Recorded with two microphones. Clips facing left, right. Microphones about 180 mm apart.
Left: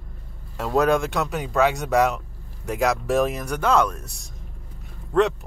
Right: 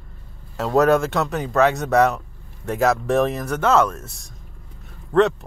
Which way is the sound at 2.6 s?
Centre (ahead or behind).